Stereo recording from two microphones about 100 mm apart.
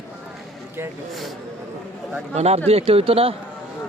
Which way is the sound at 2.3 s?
90° right.